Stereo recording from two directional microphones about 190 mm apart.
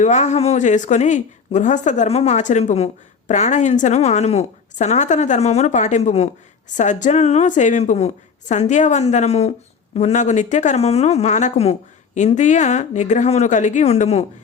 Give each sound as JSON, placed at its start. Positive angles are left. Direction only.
{"t": 0.0, "sound": "a woman's voice", "side_deg": 40}